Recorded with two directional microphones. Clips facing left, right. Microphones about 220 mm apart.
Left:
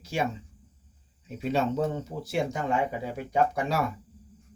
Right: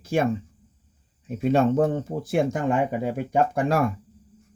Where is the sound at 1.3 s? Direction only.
50° right (ahead or behind).